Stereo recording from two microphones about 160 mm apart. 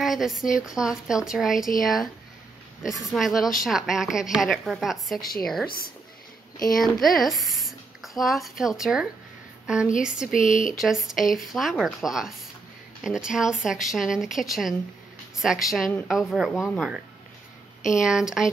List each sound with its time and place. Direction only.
0.0 s speech: centre (ahead or behind)
3.0 s speech: centre (ahead or behind)
6.8 s a woman's voice: centre (ahead or behind)
10.3 s speech: 55° left (ahead or behind)
10.8 s speech: centre (ahead or behind)